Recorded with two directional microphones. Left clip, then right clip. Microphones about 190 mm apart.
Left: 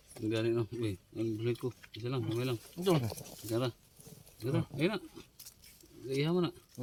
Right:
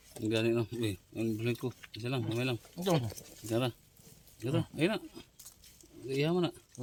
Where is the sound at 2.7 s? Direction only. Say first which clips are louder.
Left 1 dB; 45° right (ahead or behind).